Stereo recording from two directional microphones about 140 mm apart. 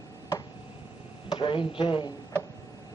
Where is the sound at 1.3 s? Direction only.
40° left (ahead or behind).